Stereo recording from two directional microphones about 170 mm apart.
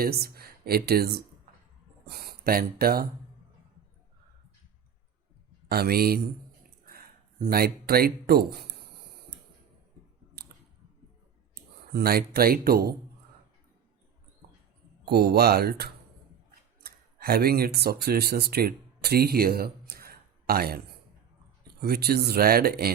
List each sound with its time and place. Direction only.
0.0 s speech: 65° right (ahead or behind)
5.6 s speech: 65° right (ahead or behind)
11.9 s speech: 65° right (ahead or behind)
15.0 s speech: 70° right (ahead or behind)